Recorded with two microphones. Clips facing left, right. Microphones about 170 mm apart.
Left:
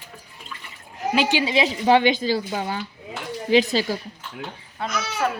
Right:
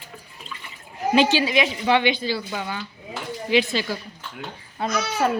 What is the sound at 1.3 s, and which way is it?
A woman's voice, 25° left (ahead or behind).